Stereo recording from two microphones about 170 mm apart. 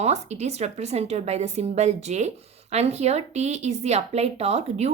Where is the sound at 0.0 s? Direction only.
40° right (ahead or behind).